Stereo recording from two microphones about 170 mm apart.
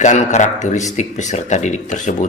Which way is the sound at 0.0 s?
45° left (ahead or behind).